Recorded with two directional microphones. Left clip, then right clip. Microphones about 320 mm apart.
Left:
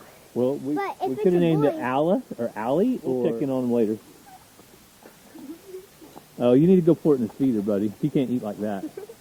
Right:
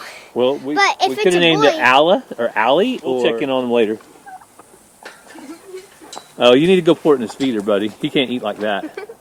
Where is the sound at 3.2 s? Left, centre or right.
Centre.